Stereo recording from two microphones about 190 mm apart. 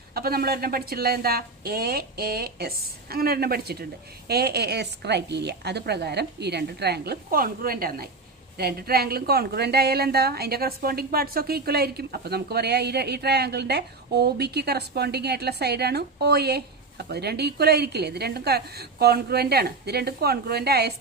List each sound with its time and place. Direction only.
0.1 s a woman's voice: 55° right (ahead or behind)